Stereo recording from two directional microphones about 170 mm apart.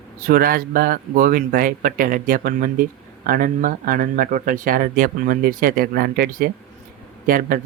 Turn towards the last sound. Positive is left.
turn(degrees=-55)  # may be behind; listen again after turning